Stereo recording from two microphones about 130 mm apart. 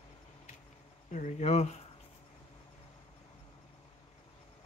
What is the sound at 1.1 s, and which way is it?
Speech, 65° left (ahead or behind).